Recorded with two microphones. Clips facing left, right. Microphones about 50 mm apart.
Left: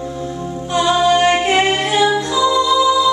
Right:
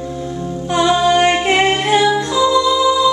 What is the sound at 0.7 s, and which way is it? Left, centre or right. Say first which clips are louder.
Music: right 1 dB; centre.